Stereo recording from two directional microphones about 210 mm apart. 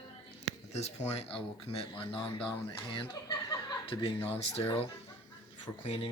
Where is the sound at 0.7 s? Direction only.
30° left (ahead or behind).